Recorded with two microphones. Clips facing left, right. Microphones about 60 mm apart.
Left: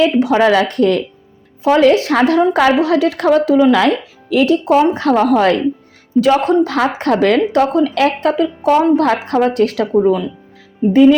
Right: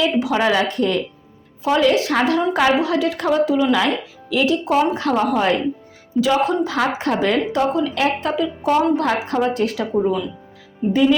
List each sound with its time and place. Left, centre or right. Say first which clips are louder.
0.0 s a woman's voice: left 6 dB; left